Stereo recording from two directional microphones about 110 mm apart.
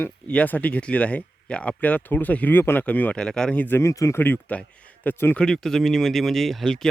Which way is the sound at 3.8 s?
25° left (ahead or behind).